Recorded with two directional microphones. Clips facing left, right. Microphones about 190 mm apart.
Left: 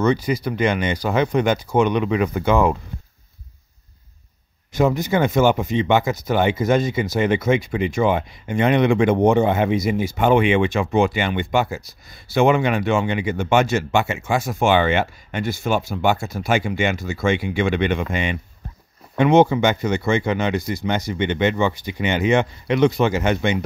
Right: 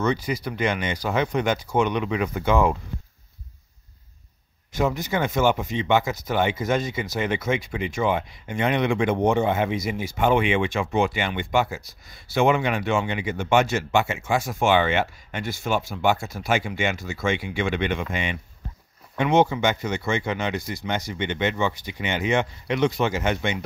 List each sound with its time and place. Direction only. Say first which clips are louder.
0.0 s speech: left 5 dB; 30° left (ahead or behind)
2.0 s speech: left 4 dB; 50° left (ahead or behind); by 2.8 s 65° left (ahead or behind)
4.7 s speech: left 5 dB; 60° left (ahead or behind)
11.5 s speech: left 1 dB; 40° left (ahead or behind)
12.4 s speech: left 4 dB; 65° left (ahead or behind); by 18.4 s 45° left (ahead or behind)
19.1 s speech: left 5 dB; 65° left (ahead or behind)